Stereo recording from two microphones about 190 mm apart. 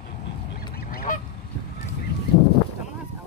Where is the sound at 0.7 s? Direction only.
50° left (ahead or behind).